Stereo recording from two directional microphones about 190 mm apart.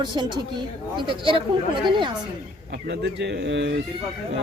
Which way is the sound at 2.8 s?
65° right (ahead or behind).